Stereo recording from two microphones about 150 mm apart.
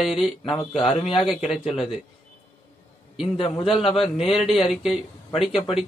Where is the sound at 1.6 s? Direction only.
40° left (ahead or behind).